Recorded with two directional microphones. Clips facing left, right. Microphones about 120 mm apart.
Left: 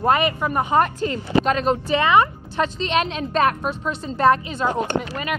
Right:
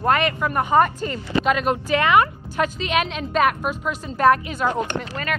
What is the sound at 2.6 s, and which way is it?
A woman's voice, 5° right (ahead or behind).